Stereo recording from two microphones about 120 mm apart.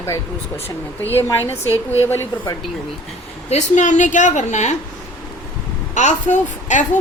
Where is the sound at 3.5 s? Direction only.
80° left.